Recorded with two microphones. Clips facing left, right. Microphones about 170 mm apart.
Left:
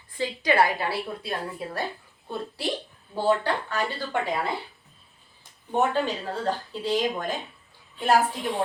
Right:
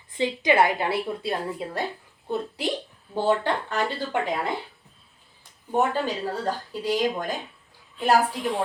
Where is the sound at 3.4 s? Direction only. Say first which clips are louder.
Right 1 dB; 20° right (ahead or behind).